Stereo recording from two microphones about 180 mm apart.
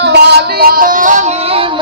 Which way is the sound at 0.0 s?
70° right (ahead or behind).